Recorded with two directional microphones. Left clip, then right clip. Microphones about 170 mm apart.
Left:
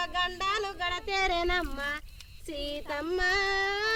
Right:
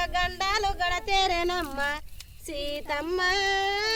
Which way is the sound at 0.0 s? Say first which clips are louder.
Right 3 dB; 40° right (ahead or behind).